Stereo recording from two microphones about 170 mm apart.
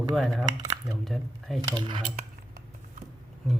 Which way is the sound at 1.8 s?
25° right (ahead or behind).